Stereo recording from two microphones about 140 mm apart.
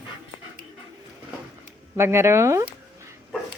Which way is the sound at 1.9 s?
20° right (ahead or behind).